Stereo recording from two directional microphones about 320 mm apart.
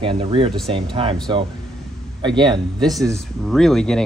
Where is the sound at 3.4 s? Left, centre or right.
Centre.